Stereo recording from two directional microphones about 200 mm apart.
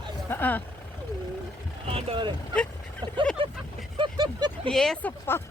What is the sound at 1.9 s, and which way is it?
Speech, 30° right (ahead or behind).